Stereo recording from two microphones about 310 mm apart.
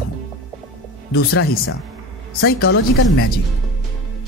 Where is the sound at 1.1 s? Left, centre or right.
Left.